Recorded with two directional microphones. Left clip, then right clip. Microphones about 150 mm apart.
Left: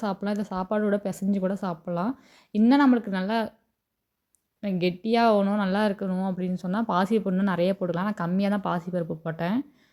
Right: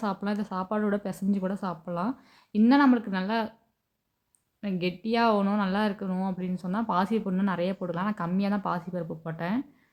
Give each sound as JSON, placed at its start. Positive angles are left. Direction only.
{"t": 0.0, "sound": "speech", "side_deg": 20}
{"t": 4.6, "sound": "speech", "side_deg": 25}